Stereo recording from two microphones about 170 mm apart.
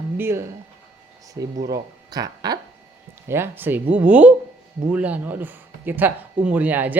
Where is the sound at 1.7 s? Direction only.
20° right (ahead or behind).